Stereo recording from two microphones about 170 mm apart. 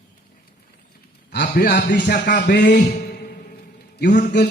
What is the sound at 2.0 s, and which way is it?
A man's voice, 55° left (ahead or behind).